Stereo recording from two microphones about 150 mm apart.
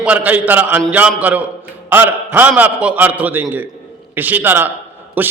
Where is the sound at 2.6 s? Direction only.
10° right (ahead or behind).